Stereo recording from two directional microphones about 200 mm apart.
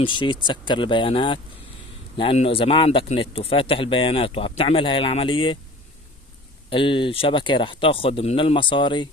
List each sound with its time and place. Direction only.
0.0 s speech: 25° left (ahead or behind)
6.7 s speech: 25° left (ahead or behind)